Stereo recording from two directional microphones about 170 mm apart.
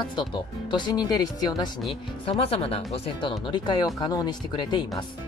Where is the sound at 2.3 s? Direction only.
35° left (ahead or behind).